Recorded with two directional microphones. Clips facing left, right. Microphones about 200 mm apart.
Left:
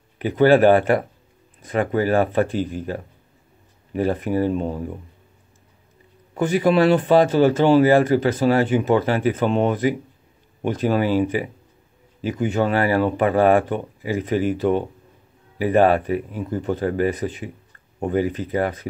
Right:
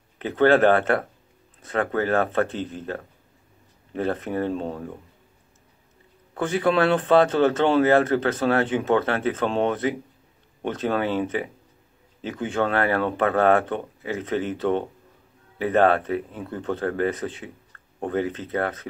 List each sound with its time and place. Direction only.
0.2 s speech: 10° left (ahead or behind)
6.3 s speech: 10° left (ahead or behind)